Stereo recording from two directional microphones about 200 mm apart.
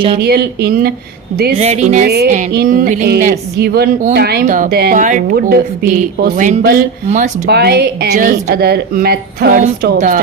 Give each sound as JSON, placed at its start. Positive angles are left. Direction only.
{"t": 0.2, "sound": "a woman's voice", "side_deg": -50}
{"t": 1.5, "sound": "speech", "side_deg": -35}
{"t": 2.5, "sound": "a woman's voice", "side_deg": -50}
{"t": 7.4, "sound": "a woman's voice", "side_deg": -55}